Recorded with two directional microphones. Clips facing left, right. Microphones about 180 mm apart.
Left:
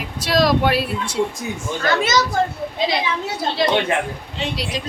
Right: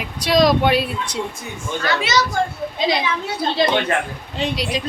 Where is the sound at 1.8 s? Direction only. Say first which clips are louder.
Left 2 dB; 45° left (ahead or behind).